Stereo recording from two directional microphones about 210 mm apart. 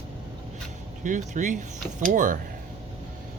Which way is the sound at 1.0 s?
35° right (ahead or behind).